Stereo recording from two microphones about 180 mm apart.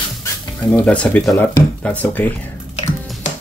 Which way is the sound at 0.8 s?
5° left (ahead or behind).